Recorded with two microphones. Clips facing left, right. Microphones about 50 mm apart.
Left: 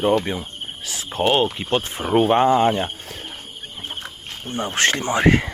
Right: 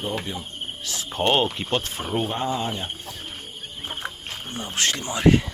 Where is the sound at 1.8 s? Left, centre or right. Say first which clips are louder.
Left 4 dB; left.